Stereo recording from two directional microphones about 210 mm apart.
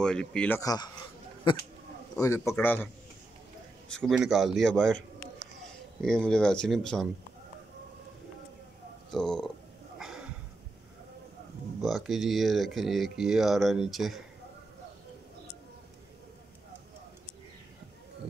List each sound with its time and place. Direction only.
0.0 s speech: 5° left (ahead or behind)
0.6 s a man's voice: 15° left (ahead or behind)
2.1 s a man's voice: 15° left (ahead or behind)
3.9 s speech: centre (ahead or behind)
9.1 s speech: 5° left (ahead or behind)
9.9 s a sound: centre (ahead or behind)
11.8 s speech: centre (ahead or behind)